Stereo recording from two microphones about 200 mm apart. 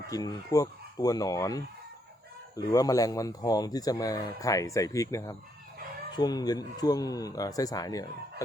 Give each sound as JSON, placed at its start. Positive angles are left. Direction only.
{"t": 0.1, "sound": "speech", "side_deg": 20}